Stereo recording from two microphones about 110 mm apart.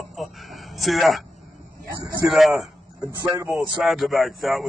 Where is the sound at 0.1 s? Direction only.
Centre (ahead or behind).